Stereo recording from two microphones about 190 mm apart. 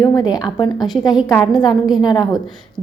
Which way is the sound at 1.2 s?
10° left (ahead or behind).